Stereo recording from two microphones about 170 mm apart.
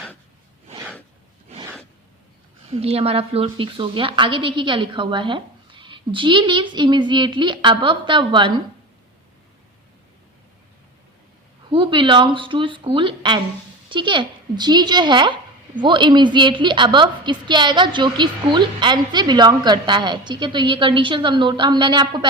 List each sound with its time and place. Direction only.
2.6 s a woman's voice: 40° right (ahead or behind)
11.7 s a woman's voice: 30° right (ahead or behind)